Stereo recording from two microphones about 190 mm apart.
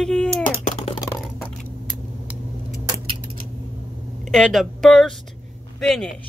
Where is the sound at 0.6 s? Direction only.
35° left (ahead or behind).